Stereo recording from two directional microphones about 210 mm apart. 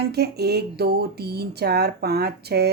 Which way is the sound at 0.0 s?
50° right (ahead or behind).